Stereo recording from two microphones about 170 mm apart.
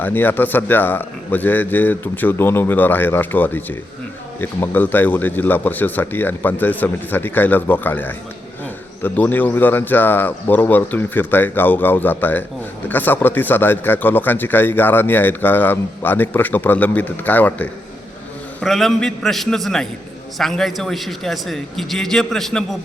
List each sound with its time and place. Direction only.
0.0 s a man's voice: 10° left (ahead or behind)